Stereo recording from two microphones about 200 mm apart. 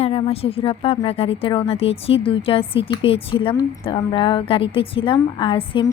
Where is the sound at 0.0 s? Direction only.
30° left (ahead or behind).